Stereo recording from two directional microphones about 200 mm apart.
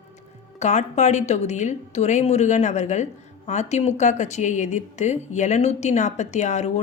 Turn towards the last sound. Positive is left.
turn(degrees=35)  # may be behind; listen again after turning